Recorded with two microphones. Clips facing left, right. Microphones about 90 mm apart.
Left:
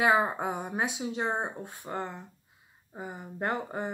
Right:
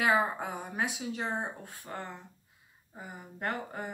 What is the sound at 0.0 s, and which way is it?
Speech, 25° left (ahead or behind).